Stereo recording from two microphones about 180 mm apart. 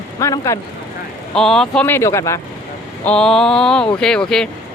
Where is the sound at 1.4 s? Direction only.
5° left (ahead or behind).